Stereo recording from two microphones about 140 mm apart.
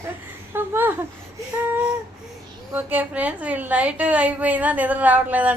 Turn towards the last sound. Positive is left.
turn(degrees=-10)  # may be behind; listen again after turning